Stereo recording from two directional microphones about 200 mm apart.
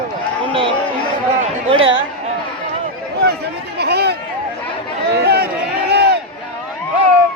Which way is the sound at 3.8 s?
55° right (ahead or behind).